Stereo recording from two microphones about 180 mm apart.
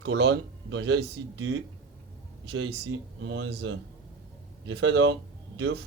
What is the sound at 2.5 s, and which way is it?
Speech, 90° right.